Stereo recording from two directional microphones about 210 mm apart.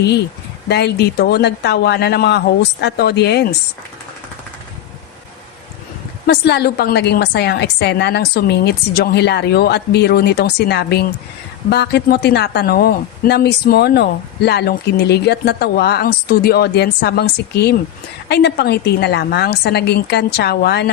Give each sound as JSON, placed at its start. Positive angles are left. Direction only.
{"t": 0.7, "sound": "speech", "side_deg": 50}
{"t": 6.2, "sound": "speech", "side_deg": 50}